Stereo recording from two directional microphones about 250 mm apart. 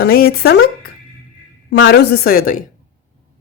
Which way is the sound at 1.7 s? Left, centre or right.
Left.